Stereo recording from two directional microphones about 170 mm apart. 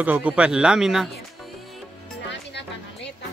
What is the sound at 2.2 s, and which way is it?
Music, 90° left.